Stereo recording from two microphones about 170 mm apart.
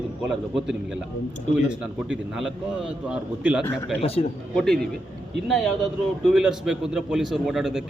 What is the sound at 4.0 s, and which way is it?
Speech, 35° left (ahead or behind).